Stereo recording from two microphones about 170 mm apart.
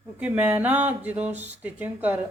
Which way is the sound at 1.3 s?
40° right (ahead or behind).